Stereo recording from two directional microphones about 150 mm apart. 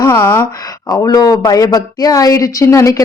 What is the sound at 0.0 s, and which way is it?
Speech, 15° left (ahead or behind).